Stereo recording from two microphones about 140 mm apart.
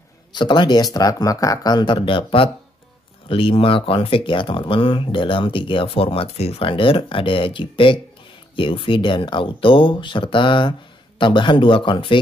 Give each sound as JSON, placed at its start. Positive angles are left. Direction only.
{"t": 0.3, "sound": "speech", "side_deg": 35}